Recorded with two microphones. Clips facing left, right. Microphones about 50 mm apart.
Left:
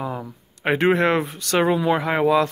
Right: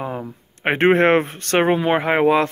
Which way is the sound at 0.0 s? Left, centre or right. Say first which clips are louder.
Right 2 dB; right.